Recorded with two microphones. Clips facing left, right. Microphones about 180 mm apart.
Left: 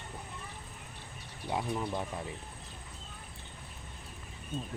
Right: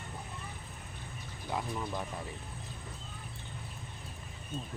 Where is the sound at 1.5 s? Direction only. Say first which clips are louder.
Left 3 dB; 20° left (ahead or behind).